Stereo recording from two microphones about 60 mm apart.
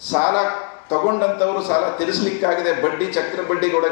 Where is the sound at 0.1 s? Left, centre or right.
Centre.